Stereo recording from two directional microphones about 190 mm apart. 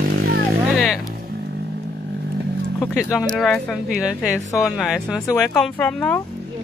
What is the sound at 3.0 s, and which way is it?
Speech, centre (ahead or behind).